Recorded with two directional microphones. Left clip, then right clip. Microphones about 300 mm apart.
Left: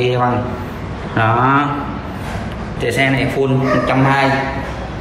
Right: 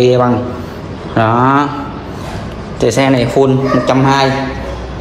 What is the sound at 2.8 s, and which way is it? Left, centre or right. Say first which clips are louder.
A man's voice: right 5 dB; centre.